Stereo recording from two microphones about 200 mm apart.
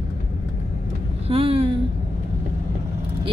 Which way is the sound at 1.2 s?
30° right (ahead or behind).